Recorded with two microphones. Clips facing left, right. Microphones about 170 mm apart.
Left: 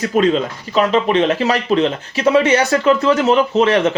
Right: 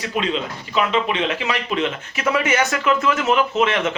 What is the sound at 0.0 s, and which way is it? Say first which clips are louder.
A man's voice: left 8 dB; 45° left (ahead or behind).